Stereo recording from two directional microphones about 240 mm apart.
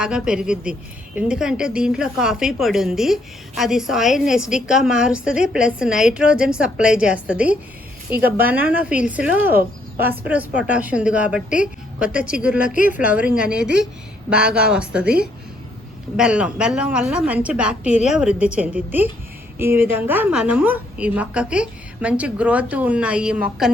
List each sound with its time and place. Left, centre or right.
0.0 s a woman's voice: centre
12.7 s a woman's voice: left
13.1 s a woman's voice: centre